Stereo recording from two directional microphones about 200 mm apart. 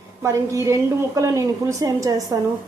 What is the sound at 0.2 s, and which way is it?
A woman's voice, 15° right (ahead or behind).